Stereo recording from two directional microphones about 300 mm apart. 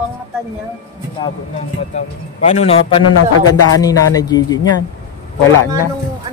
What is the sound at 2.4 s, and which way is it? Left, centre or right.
A man's voice, left.